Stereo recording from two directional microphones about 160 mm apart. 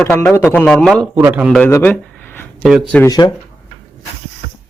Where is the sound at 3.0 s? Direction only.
25° left (ahead or behind).